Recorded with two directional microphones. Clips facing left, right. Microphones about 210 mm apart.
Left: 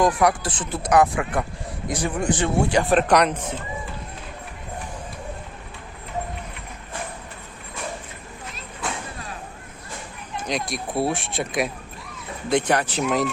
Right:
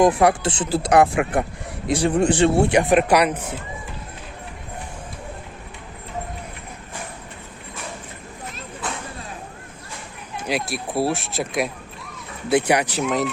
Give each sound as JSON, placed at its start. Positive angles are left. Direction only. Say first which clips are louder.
{"t": 0.0, "sound": "speech", "louder": "right 3 dB", "side_deg": -25}
{"t": 2.9, "sound": "speech", "louder": "right 1 dB", "side_deg": -10}
{"t": 10.4, "sound": "speech", "louder": "right 2 dB", "side_deg": -5}
{"t": 13.0, "sound": "speech", "louder": "even", "side_deg": 0}